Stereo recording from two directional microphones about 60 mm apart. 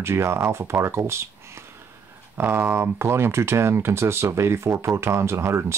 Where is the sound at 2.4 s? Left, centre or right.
Right.